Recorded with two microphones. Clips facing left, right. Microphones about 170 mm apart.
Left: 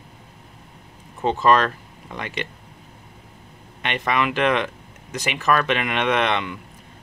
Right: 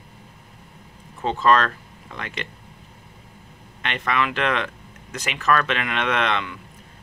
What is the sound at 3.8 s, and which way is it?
Speech, 15° left (ahead or behind).